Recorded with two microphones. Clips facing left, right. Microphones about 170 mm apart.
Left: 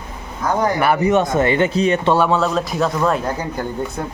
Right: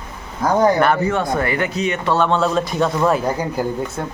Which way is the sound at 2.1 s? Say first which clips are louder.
Even; 5° left (ahead or behind).